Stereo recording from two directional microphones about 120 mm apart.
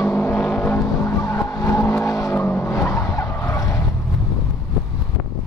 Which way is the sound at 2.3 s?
15° left (ahead or behind).